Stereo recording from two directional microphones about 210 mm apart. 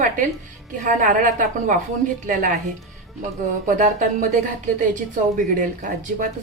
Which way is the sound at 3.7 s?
40° right (ahead or behind).